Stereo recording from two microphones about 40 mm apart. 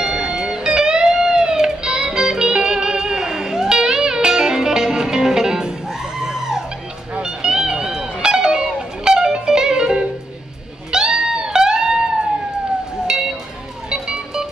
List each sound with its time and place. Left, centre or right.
0.0 s music: right
7.2 s music: centre
13.8 s music: right